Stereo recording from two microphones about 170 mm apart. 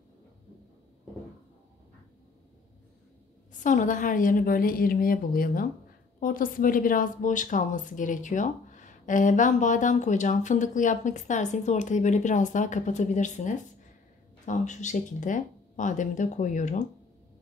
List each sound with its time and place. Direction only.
3.6 s a woman's voice: 50° left (ahead or behind)